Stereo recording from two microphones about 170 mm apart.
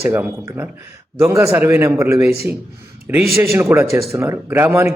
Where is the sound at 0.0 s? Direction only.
15° right (ahead or behind).